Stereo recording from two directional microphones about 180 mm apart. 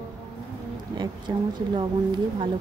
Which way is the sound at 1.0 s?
25° right (ahead or behind).